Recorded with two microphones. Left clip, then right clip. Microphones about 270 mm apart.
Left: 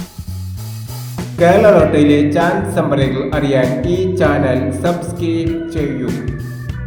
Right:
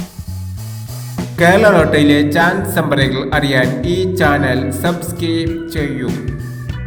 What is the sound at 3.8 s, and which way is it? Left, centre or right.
Speech, right.